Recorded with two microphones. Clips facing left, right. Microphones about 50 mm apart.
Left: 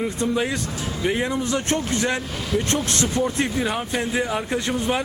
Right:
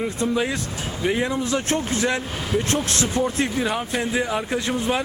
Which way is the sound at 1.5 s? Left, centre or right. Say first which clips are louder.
Even; right.